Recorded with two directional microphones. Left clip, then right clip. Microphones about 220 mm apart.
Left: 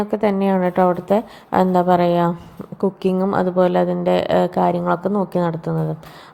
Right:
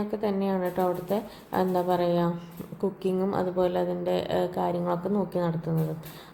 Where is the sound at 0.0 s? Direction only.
25° left (ahead or behind).